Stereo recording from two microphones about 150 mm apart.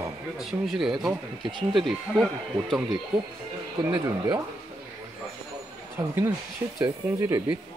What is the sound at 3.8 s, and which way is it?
Speech, 15° right (ahead or behind).